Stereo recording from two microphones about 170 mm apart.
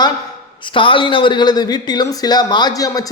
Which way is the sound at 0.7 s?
30° left (ahead or behind).